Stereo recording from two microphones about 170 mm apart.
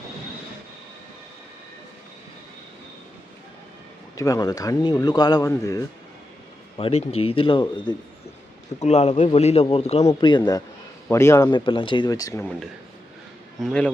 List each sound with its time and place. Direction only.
4.2 s speech: 20° left (ahead or behind)
6.7 s a man's voice: 35° left (ahead or behind)
8.8 s a man's voice: 40° left (ahead or behind)
10.1 s a man's voice: 25° left (ahead or behind)
11.5 s speech: 30° left (ahead or behind)
13.6 s speech: 5° left (ahead or behind)